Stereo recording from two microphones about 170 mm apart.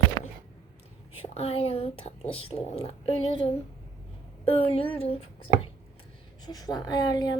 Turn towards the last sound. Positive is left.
turn(degrees=25)  # may be behind; listen again after turning